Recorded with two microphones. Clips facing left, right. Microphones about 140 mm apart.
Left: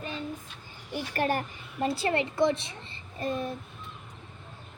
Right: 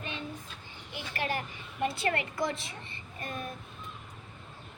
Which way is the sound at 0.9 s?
45° left (ahead or behind).